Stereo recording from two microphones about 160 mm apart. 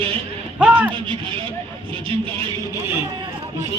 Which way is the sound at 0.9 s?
30° right (ahead or behind).